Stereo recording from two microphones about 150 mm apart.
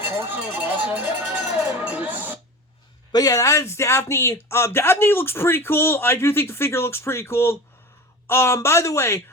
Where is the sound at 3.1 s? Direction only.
25° left (ahead or behind).